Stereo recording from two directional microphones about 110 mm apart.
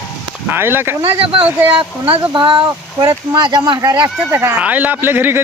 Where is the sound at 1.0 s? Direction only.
50° right (ahead or behind); by 4.0 s 35° right (ahead or behind).